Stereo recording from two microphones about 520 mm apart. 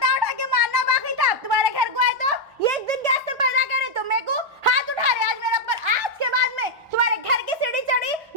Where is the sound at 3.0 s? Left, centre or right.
Right.